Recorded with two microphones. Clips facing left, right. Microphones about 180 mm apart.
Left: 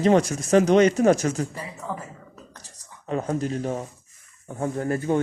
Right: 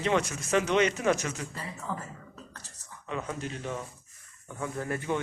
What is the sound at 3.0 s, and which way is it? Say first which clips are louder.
Speech: left 9 dB; 40° left (ahead or behind).